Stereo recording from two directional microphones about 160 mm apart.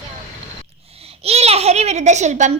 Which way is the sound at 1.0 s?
40° right (ahead or behind).